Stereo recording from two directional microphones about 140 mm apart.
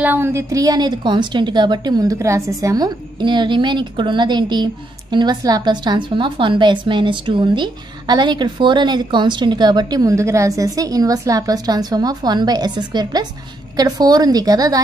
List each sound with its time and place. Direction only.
0.0 s a woman's voice: 15° right (ahead or behind)